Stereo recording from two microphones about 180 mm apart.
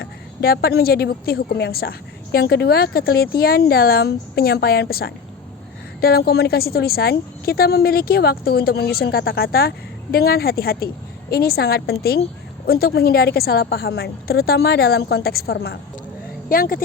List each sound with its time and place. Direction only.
0.0 s a woman's voice: 60° left (ahead or behind)